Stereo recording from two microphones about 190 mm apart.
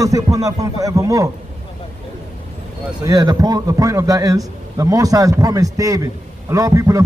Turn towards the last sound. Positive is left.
turn(degrees=-15)  # may be behind; listen again after turning